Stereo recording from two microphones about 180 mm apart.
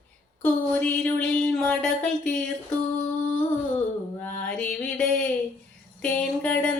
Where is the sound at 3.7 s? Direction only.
10° left (ahead or behind).